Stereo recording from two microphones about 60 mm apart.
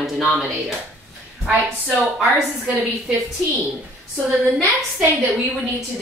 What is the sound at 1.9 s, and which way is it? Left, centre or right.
Speech, centre.